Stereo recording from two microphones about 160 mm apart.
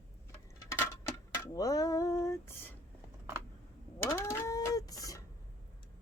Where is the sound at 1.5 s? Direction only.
20° left (ahead or behind).